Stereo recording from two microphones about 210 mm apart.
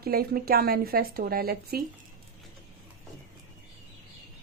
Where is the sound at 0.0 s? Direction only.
45° right (ahead or behind).